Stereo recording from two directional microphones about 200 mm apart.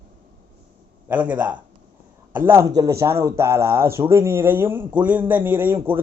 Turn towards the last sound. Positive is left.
turn(degrees=-10)  # may be behind; listen again after turning